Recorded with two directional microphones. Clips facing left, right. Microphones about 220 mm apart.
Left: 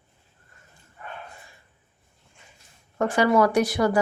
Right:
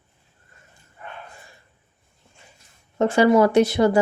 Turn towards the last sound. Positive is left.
turn(degrees=-25)  # may be behind; listen again after turning